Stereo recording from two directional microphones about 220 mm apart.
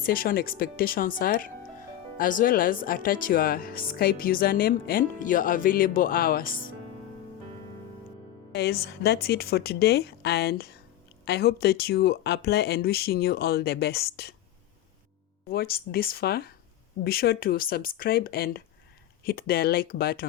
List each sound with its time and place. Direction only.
0.0 s speech: 40° left (ahead or behind)
8.5 s speech: 45° left (ahead or behind)
15.4 s speech: 45° left (ahead or behind)